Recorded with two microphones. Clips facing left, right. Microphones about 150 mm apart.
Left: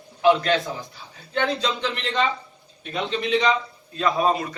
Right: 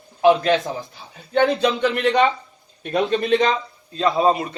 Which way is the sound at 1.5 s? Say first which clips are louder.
Right 7 dB; 60° right (ahead or behind).